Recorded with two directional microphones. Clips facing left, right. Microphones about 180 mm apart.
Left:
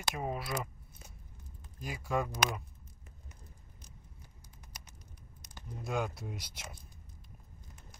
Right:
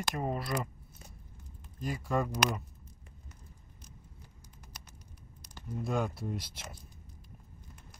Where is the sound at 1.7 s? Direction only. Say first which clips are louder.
Right 2 dB; centre (ahead or behind).